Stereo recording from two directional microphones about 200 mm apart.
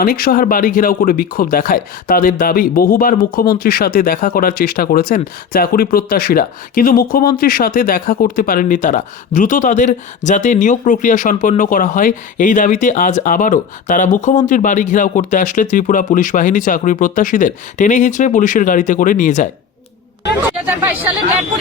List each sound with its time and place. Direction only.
0.0 s speech: 45° left (ahead or behind)